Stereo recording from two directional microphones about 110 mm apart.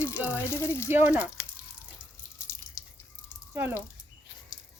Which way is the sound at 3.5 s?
20° right (ahead or behind).